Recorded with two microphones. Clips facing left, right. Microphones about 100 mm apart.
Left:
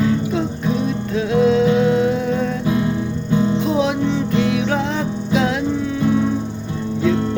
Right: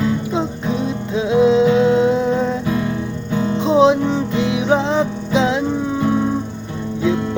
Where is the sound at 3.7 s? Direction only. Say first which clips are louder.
Right 5 dB; 25° right (ahead or behind).